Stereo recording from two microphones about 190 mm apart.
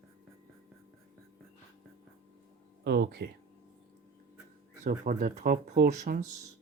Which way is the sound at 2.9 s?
60° right (ahead or behind).